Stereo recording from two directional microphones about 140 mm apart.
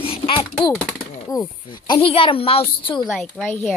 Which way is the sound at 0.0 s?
40° left (ahead or behind).